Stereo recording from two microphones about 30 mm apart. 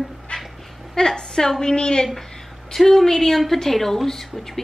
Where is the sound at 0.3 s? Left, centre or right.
Left.